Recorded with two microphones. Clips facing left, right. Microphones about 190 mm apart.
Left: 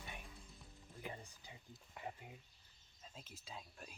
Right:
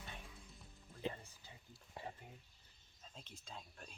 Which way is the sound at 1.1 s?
15° left (ahead or behind).